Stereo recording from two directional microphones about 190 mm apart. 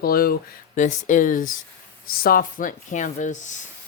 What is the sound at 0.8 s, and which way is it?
Speech, 40° left (ahead or behind).